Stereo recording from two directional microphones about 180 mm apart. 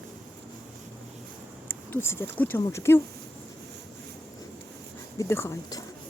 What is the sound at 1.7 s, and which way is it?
Speech, 10° left (ahead or behind).